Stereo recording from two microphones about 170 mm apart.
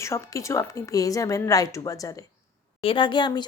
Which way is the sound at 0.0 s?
15° left (ahead or behind).